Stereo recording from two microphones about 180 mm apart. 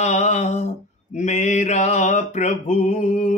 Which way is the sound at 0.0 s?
40° left (ahead or behind).